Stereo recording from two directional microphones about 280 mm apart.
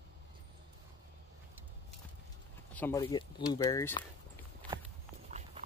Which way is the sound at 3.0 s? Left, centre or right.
Centre.